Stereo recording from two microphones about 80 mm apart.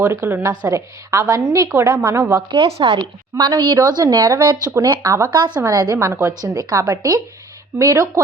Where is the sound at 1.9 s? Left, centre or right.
Right.